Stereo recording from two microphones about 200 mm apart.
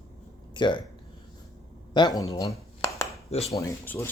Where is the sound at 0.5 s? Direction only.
25° left (ahead or behind).